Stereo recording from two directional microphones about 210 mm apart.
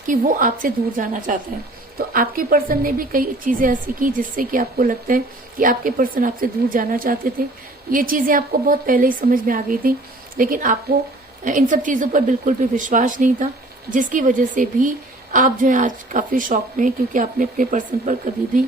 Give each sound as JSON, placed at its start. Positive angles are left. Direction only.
{"t": 0.1, "sound": "a woman's voice", "side_deg": -40}